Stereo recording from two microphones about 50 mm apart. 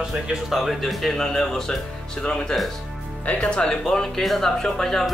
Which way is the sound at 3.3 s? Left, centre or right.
Left.